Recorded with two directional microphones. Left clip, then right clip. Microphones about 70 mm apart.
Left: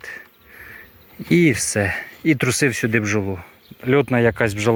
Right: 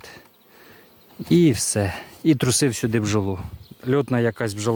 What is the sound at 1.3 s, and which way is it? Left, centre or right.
Speech, right.